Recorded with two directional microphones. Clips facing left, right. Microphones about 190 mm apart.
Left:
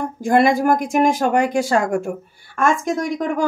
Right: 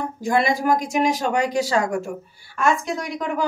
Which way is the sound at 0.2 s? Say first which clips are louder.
Left 6 dB; 50° left (ahead or behind).